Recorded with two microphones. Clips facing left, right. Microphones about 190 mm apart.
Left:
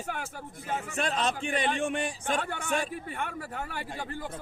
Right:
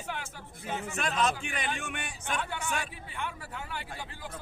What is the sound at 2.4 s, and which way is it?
A man's voice, 50° left (ahead or behind).